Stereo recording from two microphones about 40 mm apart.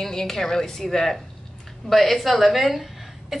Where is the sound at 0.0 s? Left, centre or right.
Centre.